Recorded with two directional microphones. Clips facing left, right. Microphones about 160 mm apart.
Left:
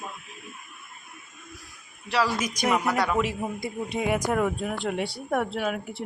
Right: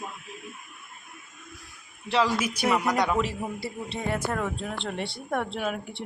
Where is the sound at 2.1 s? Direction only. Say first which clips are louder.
Right 1 dB; 20° right (ahead or behind).